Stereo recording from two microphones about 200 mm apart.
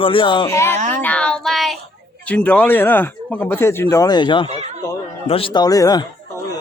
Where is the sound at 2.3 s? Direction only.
10° left (ahead or behind); by 4.4 s 25° left (ahead or behind).